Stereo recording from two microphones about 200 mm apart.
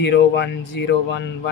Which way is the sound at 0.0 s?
60° left (ahead or behind).